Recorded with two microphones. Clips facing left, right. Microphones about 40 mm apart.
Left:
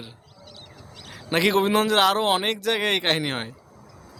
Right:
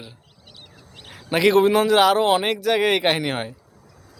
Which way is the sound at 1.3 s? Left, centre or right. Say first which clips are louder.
Right 4 dB; centre.